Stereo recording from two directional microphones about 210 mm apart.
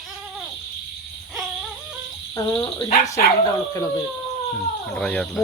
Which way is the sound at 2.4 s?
20° left (ahead or behind).